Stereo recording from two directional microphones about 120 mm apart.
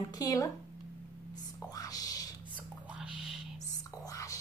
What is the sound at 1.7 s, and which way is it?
Whispering, 30° left (ahead or behind).